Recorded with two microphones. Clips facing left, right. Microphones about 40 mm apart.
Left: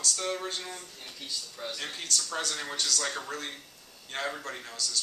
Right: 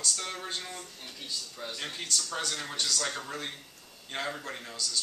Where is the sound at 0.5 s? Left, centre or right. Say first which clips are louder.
Left 1 dB; centre.